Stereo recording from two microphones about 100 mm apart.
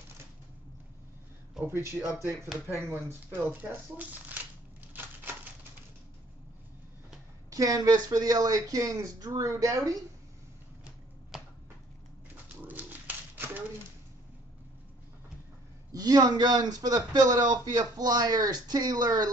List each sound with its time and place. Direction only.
2.0 s speech: 5° left (ahead or behind)
2.8 s speech: 25° right (ahead or behind)
4.9 s typewriter: 20° right (ahead or behind)
7.4 s a man's voice: 35° right (ahead or behind)
12.6 s a sound: 20° right (ahead or behind)
15.9 s a man's voice: 40° right (ahead or behind)